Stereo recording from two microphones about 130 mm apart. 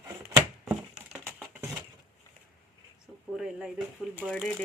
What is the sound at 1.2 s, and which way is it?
Typing, 20° right (ahead or behind).